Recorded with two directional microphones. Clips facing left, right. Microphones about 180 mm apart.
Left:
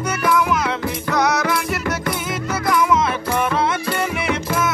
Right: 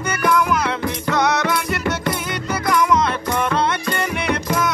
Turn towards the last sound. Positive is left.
turn(degrees=5)  # may be behind; listen again after turning